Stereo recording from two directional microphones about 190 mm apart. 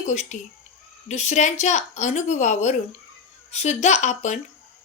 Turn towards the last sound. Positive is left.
turn(degrees=40)  # may be behind; listen again after turning